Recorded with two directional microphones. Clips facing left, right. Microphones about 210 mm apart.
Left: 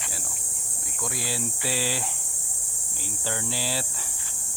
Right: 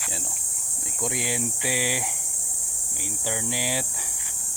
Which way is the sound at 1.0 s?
20° right (ahead or behind).